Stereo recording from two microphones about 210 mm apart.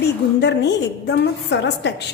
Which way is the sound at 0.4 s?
55° left (ahead or behind).